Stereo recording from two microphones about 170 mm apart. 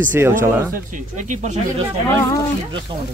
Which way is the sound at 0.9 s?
45° right (ahead or behind).